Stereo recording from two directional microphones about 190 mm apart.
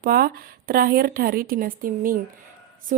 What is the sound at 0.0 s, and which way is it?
A woman's voice, 50° right (ahead or behind).